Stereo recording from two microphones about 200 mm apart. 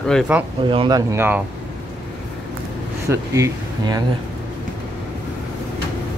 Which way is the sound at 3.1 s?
15° right (ahead or behind).